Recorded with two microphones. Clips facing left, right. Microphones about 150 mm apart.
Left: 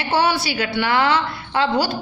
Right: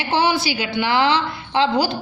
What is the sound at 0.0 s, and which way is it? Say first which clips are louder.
A man's voice: even; 10° right (ahead or behind).